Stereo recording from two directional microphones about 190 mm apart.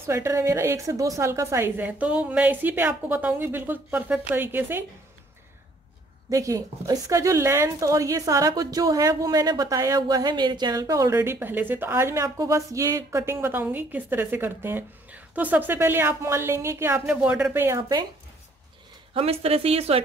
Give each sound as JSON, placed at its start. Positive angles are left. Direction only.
{"t": 0.0, "sound": "a woman's voice", "side_deg": -15}
{"t": 6.3, "sound": "a woman's voice", "side_deg": -15}
{"t": 19.1, "sound": "speech", "side_deg": -30}